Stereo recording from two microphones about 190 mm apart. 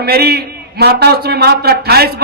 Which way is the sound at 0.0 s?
60° right (ahead or behind).